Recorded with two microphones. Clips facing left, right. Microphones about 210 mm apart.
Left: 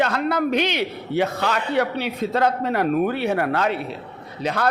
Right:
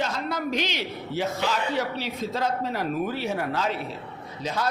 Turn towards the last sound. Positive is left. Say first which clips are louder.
# left 5 dB
turn(degrees=65)  # may be behind; listen again after turning